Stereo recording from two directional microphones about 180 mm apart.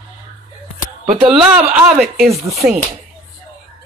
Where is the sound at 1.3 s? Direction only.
5° right (ahead or behind).